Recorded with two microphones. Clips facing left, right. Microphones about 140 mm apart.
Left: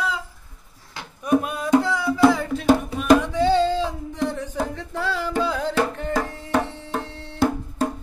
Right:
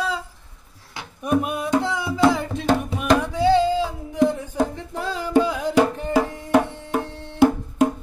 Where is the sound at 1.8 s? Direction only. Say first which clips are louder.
Left 1 dB; 20° right (ahead or behind).